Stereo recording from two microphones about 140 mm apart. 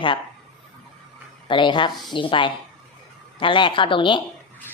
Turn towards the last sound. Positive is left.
turn(degrees=35)  # may be behind; listen again after turning